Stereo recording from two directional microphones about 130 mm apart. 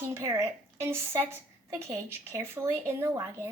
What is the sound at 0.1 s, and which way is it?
A woman's voice, 20° right (ahead or behind).